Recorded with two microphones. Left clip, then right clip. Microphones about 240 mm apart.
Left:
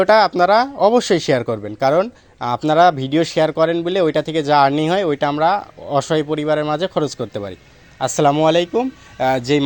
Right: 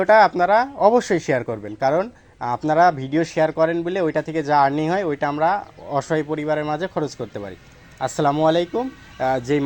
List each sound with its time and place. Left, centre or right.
0.0 s speech: left